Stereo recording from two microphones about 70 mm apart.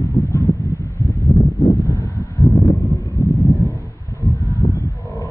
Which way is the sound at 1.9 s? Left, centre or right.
Left.